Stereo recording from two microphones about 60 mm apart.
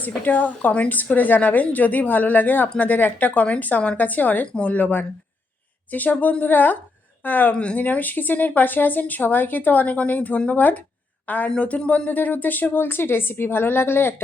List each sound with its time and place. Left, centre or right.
0.0 s a woman's voice: left
7.5 s speech: centre
7.8 s a woman's voice: left